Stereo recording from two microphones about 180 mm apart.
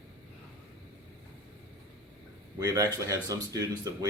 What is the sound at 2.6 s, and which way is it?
Speech, 20° right (ahead or behind).